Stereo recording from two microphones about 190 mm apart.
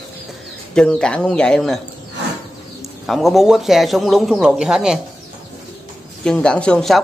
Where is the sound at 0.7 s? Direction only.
5° left (ahead or behind).